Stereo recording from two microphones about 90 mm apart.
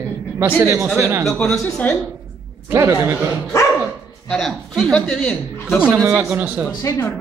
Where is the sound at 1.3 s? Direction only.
10° left (ahead or behind).